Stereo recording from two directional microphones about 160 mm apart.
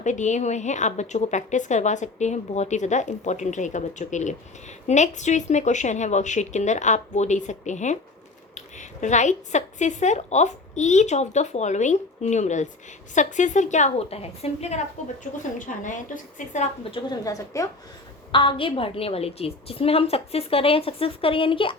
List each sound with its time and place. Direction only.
0.0 s a woman's voice: 50° left (ahead or behind)
15.2 s a woman's voice: 55° left (ahead or behind)
16.9 s speech: 25° left (ahead or behind)
18.3 s a woman's voice: 30° left (ahead or behind)